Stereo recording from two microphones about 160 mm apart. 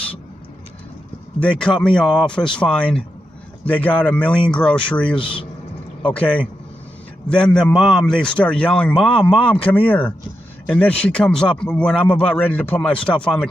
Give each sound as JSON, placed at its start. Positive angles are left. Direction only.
{"t": 1.4, "sound": "a man's voice", "side_deg": 5}
{"t": 5.1, "sound": "speech", "side_deg": 30}
{"t": 6.0, "sound": "a man's voice", "side_deg": 10}